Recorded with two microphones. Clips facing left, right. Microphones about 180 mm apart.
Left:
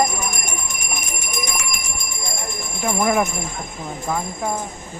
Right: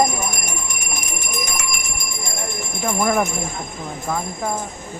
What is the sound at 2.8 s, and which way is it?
Speech, 5° left (ahead or behind).